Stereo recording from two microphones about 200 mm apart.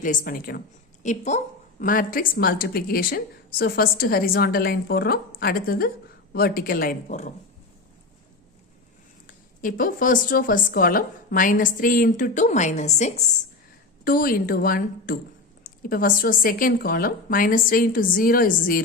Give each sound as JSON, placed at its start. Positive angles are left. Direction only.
{"t": 0.0, "sound": "speech", "side_deg": 45}
{"t": 1.0, "sound": "a woman's voice", "side_deg": 35}
{"t": 9.2, "sound": "speech", "side_deg": 45}
{"t": 14.0, "sound": "speech", "side_deg": 45}